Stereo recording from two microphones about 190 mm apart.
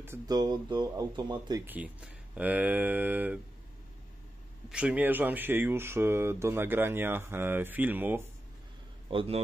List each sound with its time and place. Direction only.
0.0 s speech: 15° right (ahead or behind)
1.7 s speech: 5° right (ahead or behind)
4.6 s speech: 5° right (ahead or behind)
9.1 s speech: 30° right (ahead or behind)